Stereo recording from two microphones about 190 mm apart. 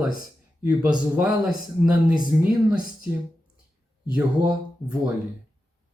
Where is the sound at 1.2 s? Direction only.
5° right (ahead or behind).